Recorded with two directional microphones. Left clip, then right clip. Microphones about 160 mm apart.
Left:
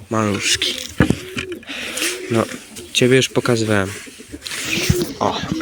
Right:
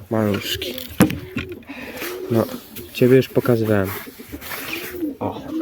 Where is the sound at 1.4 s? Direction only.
10° right (ahead or behind).